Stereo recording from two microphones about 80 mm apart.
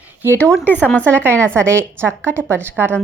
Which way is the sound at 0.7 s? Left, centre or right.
Left.